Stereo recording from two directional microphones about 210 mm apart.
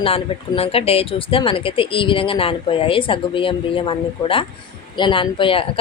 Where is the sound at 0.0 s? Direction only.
25° left (ahead or behind).